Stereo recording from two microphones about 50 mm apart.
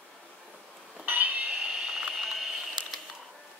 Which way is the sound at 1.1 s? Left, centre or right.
Right.